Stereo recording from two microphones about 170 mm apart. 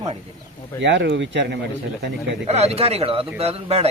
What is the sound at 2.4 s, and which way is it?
Speech, 40° right (ahead or behind).